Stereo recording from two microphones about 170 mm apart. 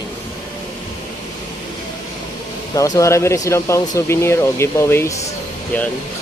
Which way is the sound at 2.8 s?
20° left (ahead or behind).